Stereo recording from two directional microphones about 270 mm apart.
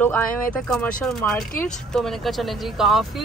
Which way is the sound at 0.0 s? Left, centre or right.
Centre.